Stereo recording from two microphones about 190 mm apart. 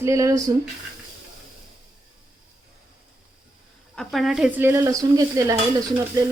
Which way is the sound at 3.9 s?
Centre (ahead or behind).